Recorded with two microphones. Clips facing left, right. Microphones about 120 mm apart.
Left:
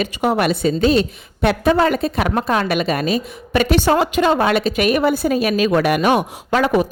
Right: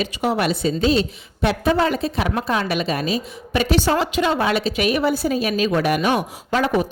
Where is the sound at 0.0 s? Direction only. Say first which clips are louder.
Left 3 dB; 55° left (ahead or behind).